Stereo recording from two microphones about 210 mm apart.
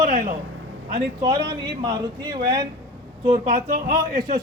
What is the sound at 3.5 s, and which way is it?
Speech, 40° right (ahead or behind).